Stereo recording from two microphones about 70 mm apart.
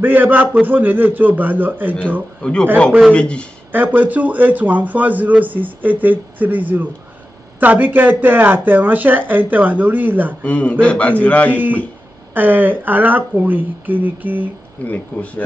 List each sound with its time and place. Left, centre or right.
0.0 s a man's voice: right
3.1 s speech: centre
3.7 s a man's voice: right
10.4 s a man's voice: centre
12.4 s a man's voice: right
14.9 s a man's voice: left